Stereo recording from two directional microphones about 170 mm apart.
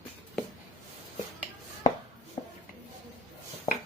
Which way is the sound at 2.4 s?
30° left (ahead or behind).